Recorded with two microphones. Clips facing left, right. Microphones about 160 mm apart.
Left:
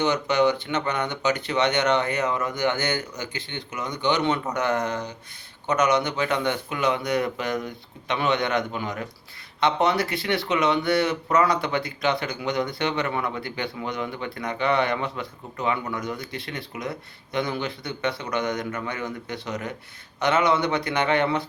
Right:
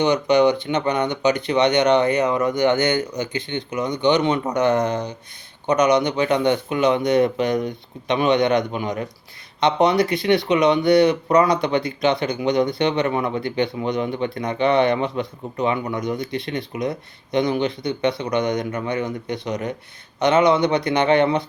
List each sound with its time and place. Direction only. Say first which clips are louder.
0.0 s speech: right 5 dB; 15° right (ahead or behind)